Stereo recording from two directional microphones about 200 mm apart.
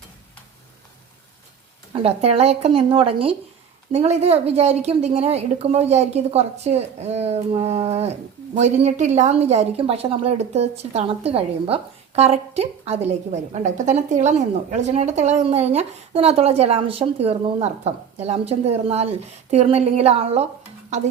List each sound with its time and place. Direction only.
1.9 s a woman's voice: 30° right (ahead or behind)